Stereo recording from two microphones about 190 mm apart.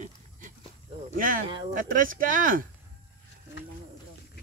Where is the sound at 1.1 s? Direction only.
45° right (ahead or behind).